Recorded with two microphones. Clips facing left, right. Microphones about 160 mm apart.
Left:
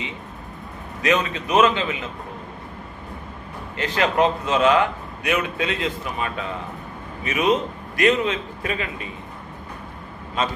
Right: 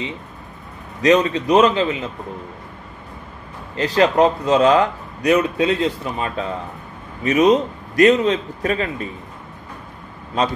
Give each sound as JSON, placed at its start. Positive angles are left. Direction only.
{"t": 1.0, "sound": "speech", "side_deg": -35}
{"t": 3.7, "sound": "speech", "side_deg": -35}